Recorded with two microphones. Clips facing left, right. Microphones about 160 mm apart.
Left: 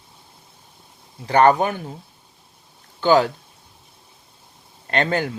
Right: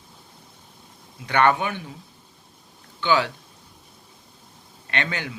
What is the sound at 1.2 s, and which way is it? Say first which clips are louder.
Speech: left 5 dB; 35° left (ahead or behind).